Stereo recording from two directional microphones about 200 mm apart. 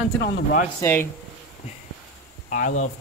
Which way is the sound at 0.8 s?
10° left (ahead or behind).